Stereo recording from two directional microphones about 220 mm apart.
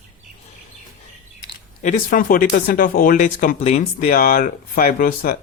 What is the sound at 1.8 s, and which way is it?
Speech, 35° left (ahead or behind).